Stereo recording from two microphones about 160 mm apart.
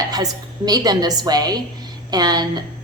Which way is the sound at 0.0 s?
25° right (ahead or behind).